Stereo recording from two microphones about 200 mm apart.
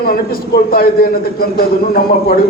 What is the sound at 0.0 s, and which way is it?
A man's voice, 50° left (ahead or behind).